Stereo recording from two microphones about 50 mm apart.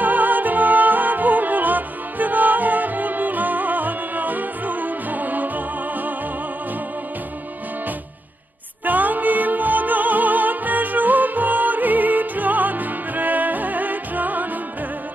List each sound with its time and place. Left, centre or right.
0.0 s music: right
8.8 s music: right